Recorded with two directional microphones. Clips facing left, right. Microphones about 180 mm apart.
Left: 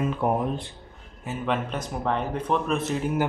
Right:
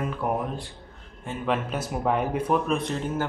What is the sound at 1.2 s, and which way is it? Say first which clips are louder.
Speech: even; centre (ahead or behind).